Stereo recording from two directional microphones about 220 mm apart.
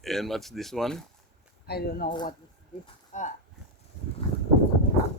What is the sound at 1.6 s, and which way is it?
Speech, 45° left (ahead or behind).